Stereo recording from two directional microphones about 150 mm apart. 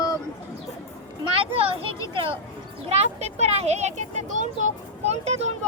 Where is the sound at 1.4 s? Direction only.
40° right (ahead or behind).